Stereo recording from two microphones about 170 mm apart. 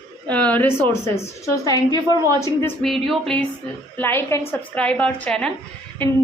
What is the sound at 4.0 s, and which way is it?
A woman's voice, 15° left (ahead or behind).